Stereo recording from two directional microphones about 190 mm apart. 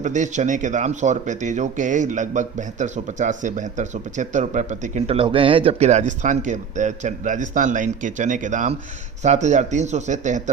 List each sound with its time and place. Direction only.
0.0 s speech: 40° right (ahead or behind)